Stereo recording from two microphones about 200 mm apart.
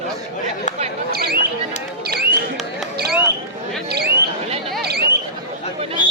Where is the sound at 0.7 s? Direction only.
35° left (ahead or behind).